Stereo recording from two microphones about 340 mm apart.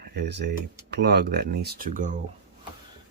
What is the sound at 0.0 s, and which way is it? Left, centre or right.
Speech, right.